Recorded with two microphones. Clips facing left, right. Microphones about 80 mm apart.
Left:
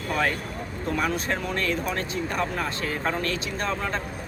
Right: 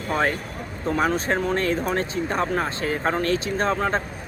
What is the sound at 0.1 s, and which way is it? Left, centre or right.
Speech, right.